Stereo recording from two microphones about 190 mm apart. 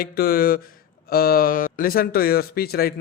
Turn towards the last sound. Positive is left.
turn(degrees=50)  # may be behind; listen again after turning